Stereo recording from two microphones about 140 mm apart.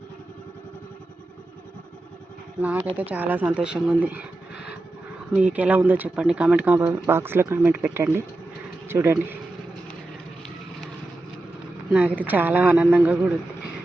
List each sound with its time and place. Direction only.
2.6 s speech: 10° right (ahead or behind)
5.3 s speech: 10° right (ahead or behind)
11.9 s speech: 5° right (ahead or behind)